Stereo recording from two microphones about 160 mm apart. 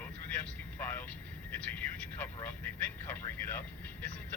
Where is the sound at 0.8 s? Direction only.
15° left (ahead or behind).